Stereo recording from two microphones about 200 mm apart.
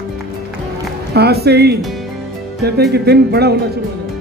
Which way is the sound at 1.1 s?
55° right (ahead or behind).